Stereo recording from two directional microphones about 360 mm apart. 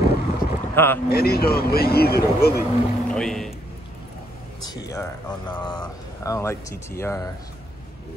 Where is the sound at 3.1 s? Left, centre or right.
Centre.